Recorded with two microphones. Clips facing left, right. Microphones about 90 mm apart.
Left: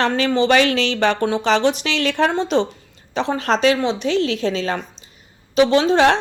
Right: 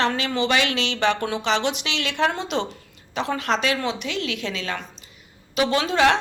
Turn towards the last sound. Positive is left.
turn(degrees=30)  # may be behind; listen again after turning